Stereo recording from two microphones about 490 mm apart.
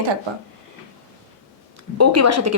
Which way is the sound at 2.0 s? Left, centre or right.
Right.